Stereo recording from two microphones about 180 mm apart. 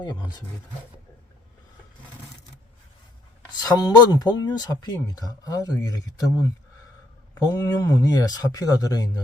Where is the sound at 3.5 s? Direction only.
20° left (ahead or behind).